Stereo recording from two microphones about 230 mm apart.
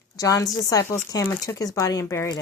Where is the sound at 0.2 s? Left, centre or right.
Centre.